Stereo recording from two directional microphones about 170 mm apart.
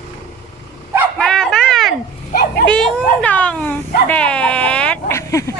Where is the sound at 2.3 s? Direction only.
60° left (ahead or behind).